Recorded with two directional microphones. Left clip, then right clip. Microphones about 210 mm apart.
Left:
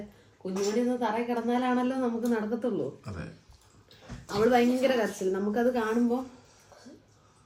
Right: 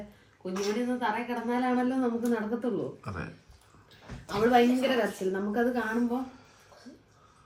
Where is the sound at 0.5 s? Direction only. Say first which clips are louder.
Left 3 dB; 50° left (ahead or behind).